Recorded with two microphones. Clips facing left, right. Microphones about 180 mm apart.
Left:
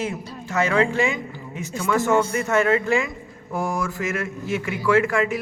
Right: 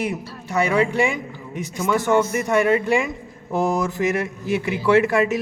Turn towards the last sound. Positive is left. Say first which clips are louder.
# right 3 dB
turn(degrees=-20)  # may be behind; listen again after turning